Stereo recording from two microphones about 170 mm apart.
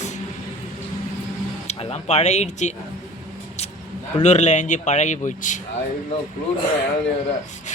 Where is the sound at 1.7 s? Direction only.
35° left (ahead or behind).